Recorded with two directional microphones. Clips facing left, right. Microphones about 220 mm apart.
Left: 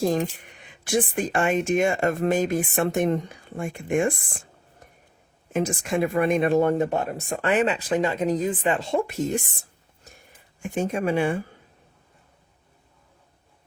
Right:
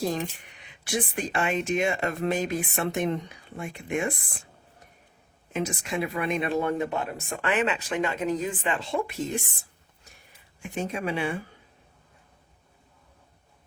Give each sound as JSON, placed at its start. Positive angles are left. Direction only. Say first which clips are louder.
{"t": 0.0, "sound": "speech", "louder": "left 5 dB", "side_deg": 45}
{"t": 5.5, "sound": "speech", "louder": "left 5 dB", "side_deg": 50}
{"t": 10.6, "sound": "speech", "louder": "left 5 dB", "side_deg": 45}